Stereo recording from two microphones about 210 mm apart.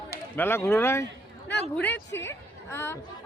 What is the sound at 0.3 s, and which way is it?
A woman's voice, 10° left (ahead or behind).